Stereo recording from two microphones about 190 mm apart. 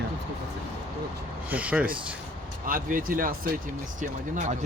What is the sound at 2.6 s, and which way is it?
Speech, 45° right (ahead or behind).